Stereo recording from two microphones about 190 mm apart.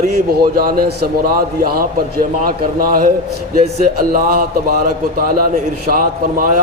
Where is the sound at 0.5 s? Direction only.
50° right (ahead or behind).